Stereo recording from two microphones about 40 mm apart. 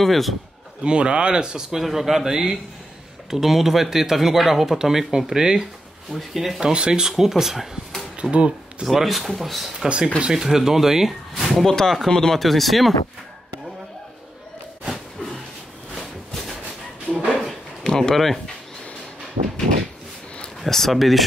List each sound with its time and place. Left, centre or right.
0.0 s speech: centre
0.8 s speech: right
1.8 s speech: centre
6.1 s speech: centre
6.6 s speech: right; by 8.0 s centre
8.2 s speech: right
8.8 s speech: centre
10.2 s speech: centre
11.4 s speech: centre
12.4 s speech: centre
14.9 s a sound: centre
17.1 s a sound: left
17.8 s speech: centre
20.6 s speech: centre